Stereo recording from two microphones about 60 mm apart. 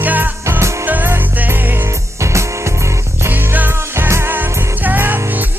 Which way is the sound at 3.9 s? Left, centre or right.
Right.